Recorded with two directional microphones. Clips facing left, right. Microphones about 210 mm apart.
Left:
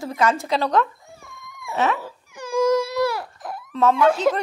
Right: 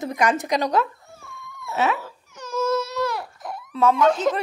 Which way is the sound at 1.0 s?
15° left (ahead or behind).